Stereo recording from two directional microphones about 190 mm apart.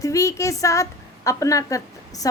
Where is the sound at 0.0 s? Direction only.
15° left (ahead or behind).